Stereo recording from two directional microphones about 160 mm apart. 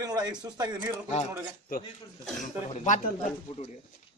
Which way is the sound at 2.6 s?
45° left (ahead or behind).